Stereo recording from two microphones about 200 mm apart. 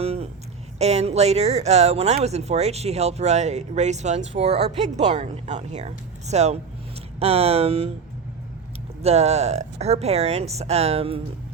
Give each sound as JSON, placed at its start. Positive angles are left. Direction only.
{"t": 0.0, "sound": "a sound", "side_deg": -30}
{"t": 0.8, "sound": "speech", "side_deg": -35}
{"t": 9.0, "sound": "speech", "side_deg": -30}